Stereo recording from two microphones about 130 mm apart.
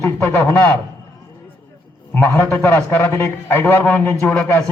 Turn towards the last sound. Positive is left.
turn(degrees=15)  # may be behind; listen again after turning